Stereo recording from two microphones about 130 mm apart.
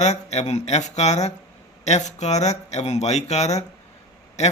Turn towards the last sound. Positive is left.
turn(degrees=60)  # may be behind; listen again after turning